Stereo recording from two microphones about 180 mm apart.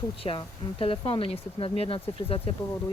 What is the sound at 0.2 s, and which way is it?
Speech, 30° left (ahead or behind).